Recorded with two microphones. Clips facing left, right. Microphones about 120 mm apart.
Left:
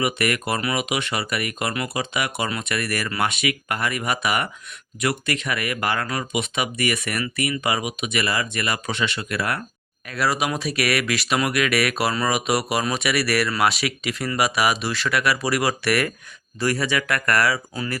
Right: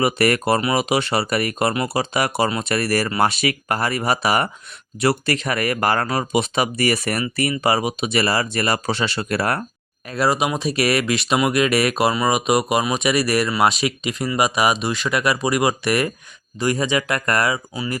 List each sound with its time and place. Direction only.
0.0 s speech: 35° right (ahead or behind)
10.1 s speech: 25° right (ahead or behind)